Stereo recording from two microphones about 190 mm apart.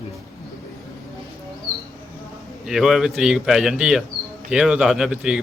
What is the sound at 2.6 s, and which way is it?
A man's voice, centre (ahead or behind).